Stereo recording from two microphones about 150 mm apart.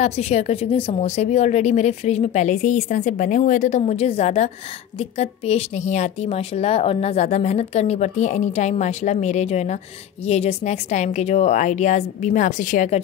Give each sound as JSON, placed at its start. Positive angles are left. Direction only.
{"t": 0.0, "sound": "a woman's voice", "side_deg": 45}